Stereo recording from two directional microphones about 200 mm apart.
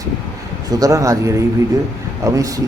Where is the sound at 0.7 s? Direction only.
15° right (ahead or behind).